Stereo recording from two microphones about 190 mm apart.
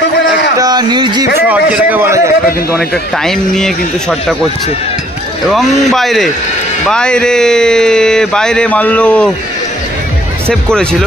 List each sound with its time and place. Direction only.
0.6 s a sound: 20° right (ahead or behind)
1.5 s a man's voice: 10° right (ahead or behind)
3.3 s speech: centre (ahead or behind)
5.5 s speech: centre (ahead or behind)
10.5 s speech: 5° left (ahead or behind)